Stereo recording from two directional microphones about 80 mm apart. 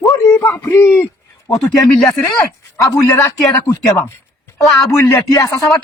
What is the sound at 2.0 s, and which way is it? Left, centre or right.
Speech, left.